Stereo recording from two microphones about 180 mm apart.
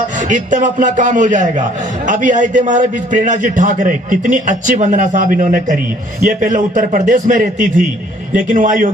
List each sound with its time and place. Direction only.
0.3 s a man's voice: 45° right (ahead or behind)